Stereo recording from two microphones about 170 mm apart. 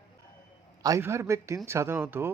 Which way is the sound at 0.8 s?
20° right (ahead or behind).